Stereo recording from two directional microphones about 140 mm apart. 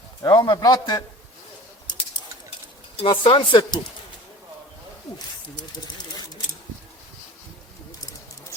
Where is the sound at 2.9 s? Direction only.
40° left (ahead or behind).